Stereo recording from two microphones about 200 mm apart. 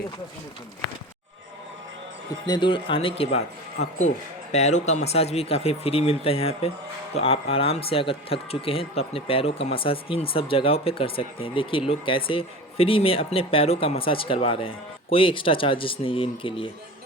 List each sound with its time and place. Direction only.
2.5 s speech: 25° left (ahead or behind)